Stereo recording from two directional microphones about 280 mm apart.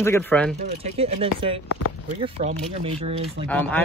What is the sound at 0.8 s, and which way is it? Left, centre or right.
Speech, right.